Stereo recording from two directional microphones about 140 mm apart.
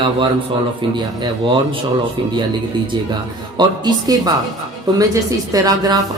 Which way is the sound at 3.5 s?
30° right (ahead or behind).